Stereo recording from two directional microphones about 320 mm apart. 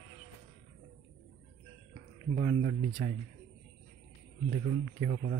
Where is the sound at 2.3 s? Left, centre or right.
Right.